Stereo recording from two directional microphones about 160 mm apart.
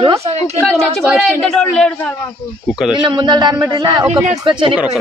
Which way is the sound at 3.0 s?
30° right (ahead or behind).